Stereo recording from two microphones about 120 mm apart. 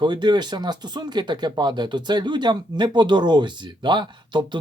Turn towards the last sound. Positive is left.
turn(degrees=-40)  # may be behind; listen again after turning